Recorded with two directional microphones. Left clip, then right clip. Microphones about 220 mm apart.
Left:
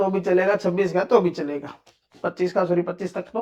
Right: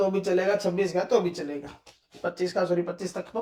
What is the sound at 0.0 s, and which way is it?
Speech, 25° left (ahead or behind).